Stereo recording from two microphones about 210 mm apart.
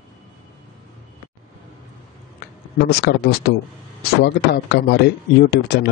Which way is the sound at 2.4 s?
50° left (ahead or behind).